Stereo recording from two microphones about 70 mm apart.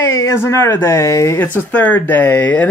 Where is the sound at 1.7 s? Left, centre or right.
Left.